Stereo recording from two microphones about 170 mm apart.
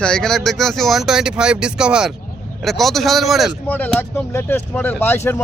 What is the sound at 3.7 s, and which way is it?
Speech, 10° left (ahead or behind).